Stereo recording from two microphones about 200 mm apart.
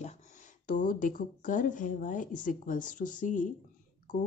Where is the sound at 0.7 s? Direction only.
40° left (ahead or behind).